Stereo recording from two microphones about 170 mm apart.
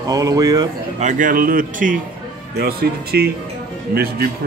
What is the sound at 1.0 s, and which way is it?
Speech, 45° right (ahead or behind).